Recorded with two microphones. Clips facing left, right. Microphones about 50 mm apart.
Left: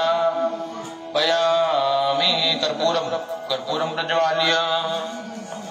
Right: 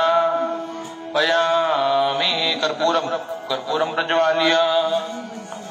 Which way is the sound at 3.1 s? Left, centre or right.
Centre.